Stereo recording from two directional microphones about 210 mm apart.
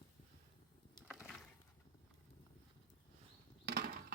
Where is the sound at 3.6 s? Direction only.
50° right (ahead or behind).